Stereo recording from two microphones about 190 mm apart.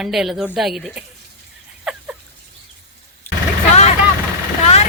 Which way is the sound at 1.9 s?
Centre (ahead or behind).